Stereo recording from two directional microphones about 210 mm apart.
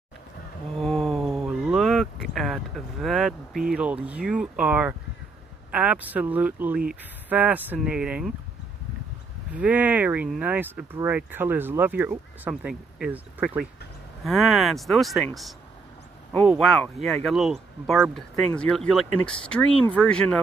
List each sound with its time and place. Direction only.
0.7 s speech: centre (ahead or behind)
9.5 s speech: 5° right (ahead or behind)
16.3 s speech: centre (ahead or behind)